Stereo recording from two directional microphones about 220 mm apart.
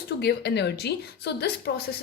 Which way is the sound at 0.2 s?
50° left (ahead or behind).